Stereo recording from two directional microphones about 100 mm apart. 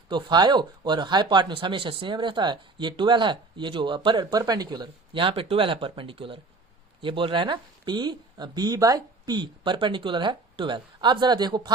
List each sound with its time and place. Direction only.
0.1 s speech: 50° right (ahead or behind)
5.1 s speech: 65° right (ahead or behind); by 11.7 s 45° right (ahead or behind)